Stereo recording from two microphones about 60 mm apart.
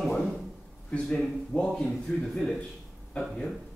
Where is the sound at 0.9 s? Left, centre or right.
Centre.